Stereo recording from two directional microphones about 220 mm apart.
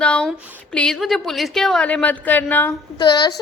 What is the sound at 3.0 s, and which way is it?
Speech, 20° left (ahead or behind).